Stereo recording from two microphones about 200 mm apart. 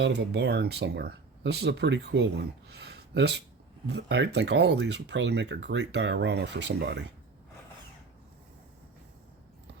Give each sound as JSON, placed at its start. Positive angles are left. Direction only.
{"t": 0.0, "sound": "speech", "side_deg": -60}
{"t": 2.6, "sound": "a sound", "side_deg": -55}
{"t": 3.8, "sound": "speech", "side_deg": -55}